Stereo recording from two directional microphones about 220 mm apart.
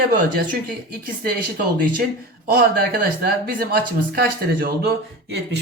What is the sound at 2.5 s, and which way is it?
Speech, 45° right (ahead or behind).